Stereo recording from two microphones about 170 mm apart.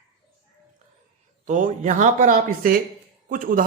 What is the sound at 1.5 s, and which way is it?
A man's voice, 45° right (ahead or behind).